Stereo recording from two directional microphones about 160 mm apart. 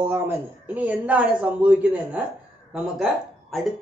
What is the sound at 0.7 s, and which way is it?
Speech, 10° right (ahead or behind).